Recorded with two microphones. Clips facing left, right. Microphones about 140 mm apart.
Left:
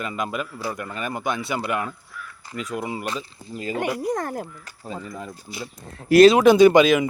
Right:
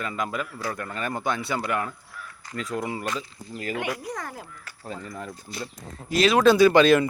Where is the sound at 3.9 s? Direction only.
50° left (ahead or behind).